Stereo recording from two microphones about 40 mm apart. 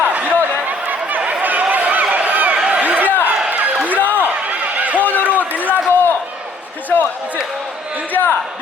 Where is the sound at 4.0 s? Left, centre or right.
Left.